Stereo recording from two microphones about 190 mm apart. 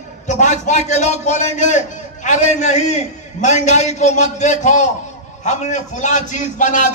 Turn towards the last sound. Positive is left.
turn(degrees=40)  # may be behind; listen again after turning